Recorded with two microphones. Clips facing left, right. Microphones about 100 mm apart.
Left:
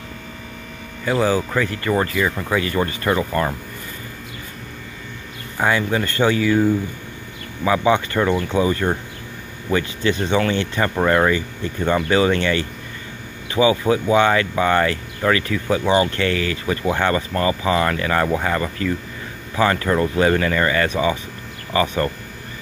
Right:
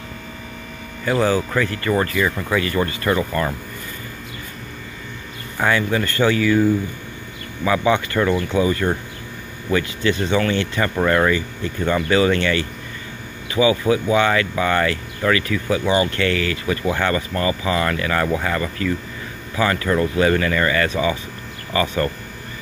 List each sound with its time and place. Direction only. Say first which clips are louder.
1.0 s speech: even; 10° left (ahead or behind)
5.6 s speech: even; 20° left (ahead or behind)